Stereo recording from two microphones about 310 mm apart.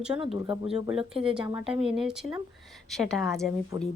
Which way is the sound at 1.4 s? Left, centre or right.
Centre.